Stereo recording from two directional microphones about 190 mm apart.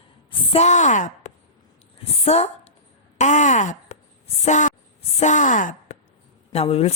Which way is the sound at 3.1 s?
40° left (ahead or behind).